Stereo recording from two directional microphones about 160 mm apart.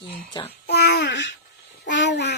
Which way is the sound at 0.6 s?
90° left.